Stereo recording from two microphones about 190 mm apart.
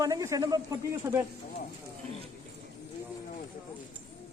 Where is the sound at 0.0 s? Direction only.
15° right (ahead or behind).